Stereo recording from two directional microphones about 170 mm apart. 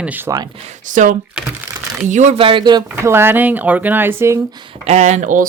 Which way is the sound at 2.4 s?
30° right (ahead or behind).